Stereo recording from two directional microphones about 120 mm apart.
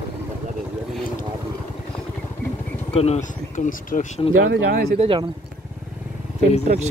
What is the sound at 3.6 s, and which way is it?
Speech, 90° left.